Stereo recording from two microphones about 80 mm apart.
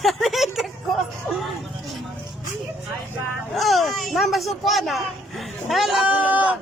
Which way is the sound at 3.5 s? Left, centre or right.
Centre.